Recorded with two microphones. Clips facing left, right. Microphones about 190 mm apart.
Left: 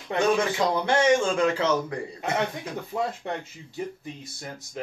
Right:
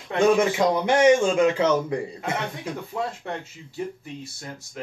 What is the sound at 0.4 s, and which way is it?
A man's voice, 20° right (ahead or behind).